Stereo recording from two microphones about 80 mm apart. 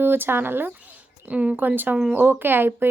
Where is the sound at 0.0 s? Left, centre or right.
Right.